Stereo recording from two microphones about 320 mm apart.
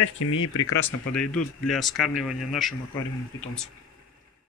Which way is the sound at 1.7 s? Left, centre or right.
Centre.